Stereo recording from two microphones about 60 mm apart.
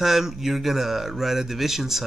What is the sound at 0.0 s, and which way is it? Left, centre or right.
Speech, centre.